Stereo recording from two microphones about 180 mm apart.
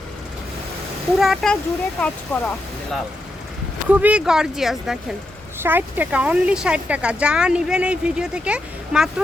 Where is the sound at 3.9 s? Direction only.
10° right (ahead or behind).